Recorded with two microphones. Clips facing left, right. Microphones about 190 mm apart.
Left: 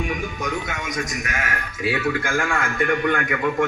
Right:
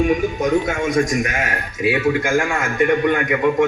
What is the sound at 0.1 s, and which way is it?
Speech, 25° right (ahead or behind).